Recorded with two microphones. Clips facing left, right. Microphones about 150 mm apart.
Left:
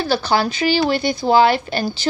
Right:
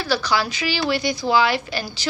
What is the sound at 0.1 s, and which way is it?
Speech, 50° left (ahead or behind).